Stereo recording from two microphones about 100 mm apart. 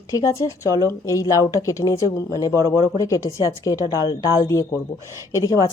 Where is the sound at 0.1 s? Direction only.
35° left (ahead or behind).